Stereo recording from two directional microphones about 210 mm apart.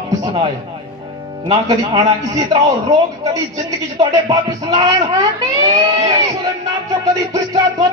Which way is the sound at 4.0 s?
20° right (ahead or behind).